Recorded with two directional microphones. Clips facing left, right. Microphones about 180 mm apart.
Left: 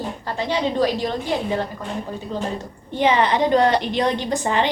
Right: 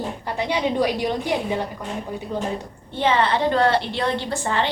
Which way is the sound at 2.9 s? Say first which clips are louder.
Left 2 dB; 15° left (ahead or behind).